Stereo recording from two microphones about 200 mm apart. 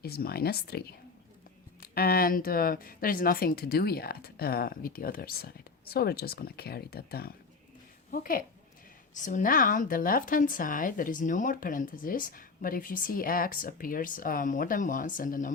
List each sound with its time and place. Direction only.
0.0 s speech: 50° left (ahead or behind)